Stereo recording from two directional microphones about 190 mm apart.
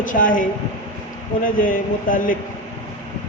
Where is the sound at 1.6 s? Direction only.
45° left (ahead or behind).